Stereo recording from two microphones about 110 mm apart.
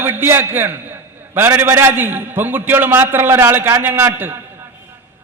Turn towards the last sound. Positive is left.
turn(degrees=-20)  # may be behind; listen again after turning